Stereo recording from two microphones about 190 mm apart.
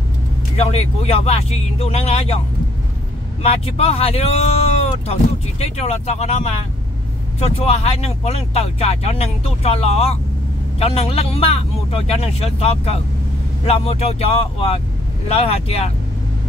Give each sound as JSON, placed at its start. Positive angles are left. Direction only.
{"t": 0.6, "sound": "speech", "side_deg": 35}
{"t": 3.4, "sound": "speech", "side_deg": 35}